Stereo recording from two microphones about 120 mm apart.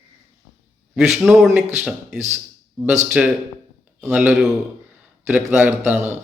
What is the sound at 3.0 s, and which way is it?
A man's voice, 10° right (ahead or behind).